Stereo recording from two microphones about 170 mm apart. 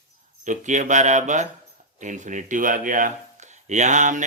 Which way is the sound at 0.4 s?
45° right (ahead or behind).